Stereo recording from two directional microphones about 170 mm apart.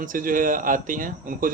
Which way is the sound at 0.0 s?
55° right (ahead or behind).